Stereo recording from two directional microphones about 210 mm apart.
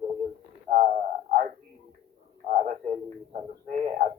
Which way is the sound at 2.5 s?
35° right (ahead or behind).